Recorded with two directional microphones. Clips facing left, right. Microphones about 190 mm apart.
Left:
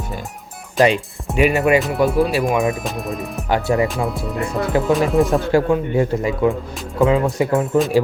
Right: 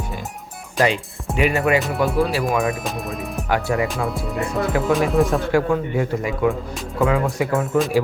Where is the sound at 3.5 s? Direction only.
25° left (ahead or behind).